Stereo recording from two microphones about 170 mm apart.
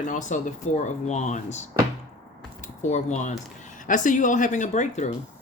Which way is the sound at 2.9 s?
45° left (ahead or behind).